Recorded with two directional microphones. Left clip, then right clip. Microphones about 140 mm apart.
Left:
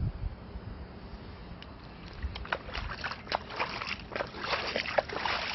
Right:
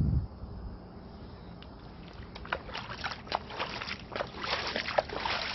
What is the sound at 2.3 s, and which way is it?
Boat, 80° left.